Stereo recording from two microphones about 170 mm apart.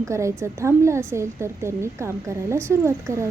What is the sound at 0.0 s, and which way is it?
A woman's voice, 15° right (ahead or behind).